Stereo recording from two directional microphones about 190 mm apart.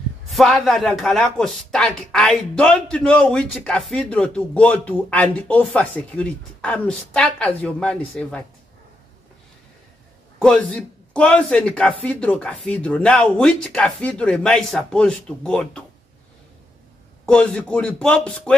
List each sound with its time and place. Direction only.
0.3 s speech: centre (ahead or behind)
10.4 s speech: 5° left (ahead or behind)
17.3 s speech: 5° left (ahead or behind)